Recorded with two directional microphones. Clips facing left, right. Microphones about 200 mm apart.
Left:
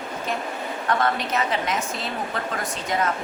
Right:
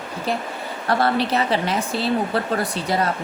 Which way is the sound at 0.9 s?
35° right (ahead or behind).